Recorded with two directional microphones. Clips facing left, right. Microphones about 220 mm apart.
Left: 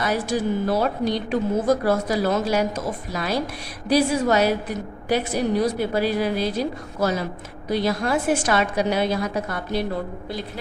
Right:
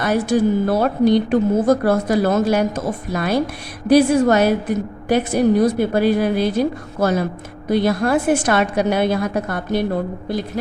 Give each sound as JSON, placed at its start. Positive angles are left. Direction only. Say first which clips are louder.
{"t": 0.0, "sound": "a woman's voice", "louder": "right 6 dB", "side_deg": -50}